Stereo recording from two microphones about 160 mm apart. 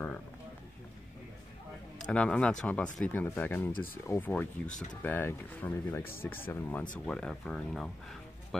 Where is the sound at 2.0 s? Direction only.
5° left (ahead or behind).